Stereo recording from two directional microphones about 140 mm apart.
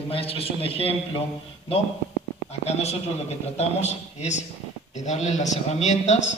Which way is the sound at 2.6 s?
50° left (ahead or behind).